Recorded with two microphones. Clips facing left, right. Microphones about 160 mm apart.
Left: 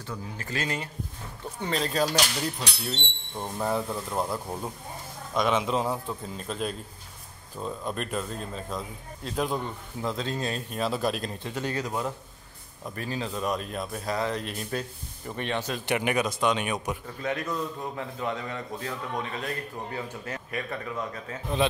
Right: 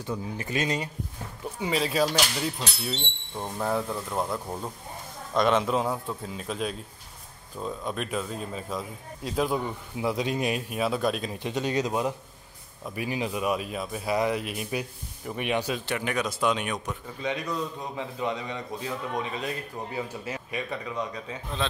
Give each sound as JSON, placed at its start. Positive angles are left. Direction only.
{"t": 0.0, "sound": "speech", "side_deg": -20}
{"t": 1.6, "sound": "speech", "side_deg": -5}
{"t": 11.3, "sound": "speech", "side_deg": -15}
{"t": 15.8, "sound": "speech", "side_deg": 15}
{"t": 16.3, "sound": "speech", "side_deg": 0}
{"t": 18.3, "sound": "speech", "side_deg": -15}